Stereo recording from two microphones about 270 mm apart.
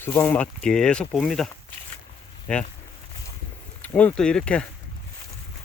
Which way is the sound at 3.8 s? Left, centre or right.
Centre.